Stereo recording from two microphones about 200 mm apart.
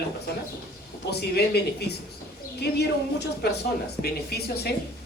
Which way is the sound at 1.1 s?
55° left (ahead or behind).